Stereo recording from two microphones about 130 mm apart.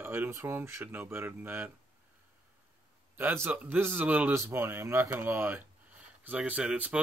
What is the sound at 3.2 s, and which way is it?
Speech, 15° right (ahead or behind).